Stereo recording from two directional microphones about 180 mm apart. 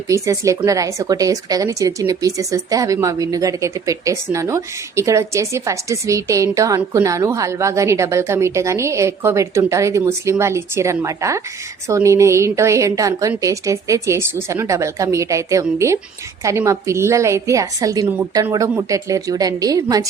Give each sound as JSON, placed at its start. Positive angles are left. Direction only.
{"t": 0.1, "sound": "speech", "side_deg": -15}